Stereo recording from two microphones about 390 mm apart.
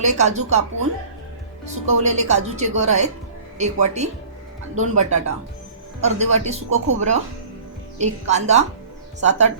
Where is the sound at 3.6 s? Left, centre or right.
Centre.